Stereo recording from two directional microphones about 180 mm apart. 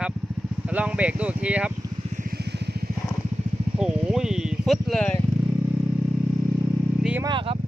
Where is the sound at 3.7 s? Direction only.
5° right (ahead or behind).